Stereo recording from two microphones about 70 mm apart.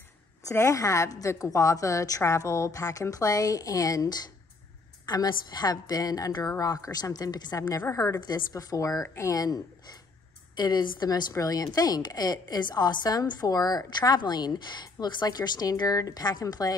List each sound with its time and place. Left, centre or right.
0.5 s a woman's voice: left
7.9 s a woman's voice: left
8.2 s a woman's voice: left
10.5 s a woman's voice: left
11.3 s a woman's voice: left